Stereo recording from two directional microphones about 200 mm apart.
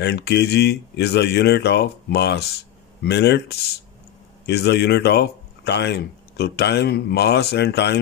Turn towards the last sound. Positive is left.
turn(degrees=55)  # may be behind; listen again after turning